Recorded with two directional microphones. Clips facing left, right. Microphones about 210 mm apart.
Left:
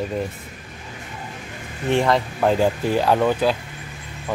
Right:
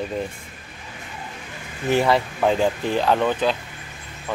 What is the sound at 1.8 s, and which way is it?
Speech, 5° right (ahead or behind).